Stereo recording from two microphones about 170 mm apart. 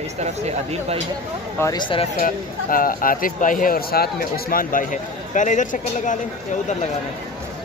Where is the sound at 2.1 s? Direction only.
55° left (ahead or behind).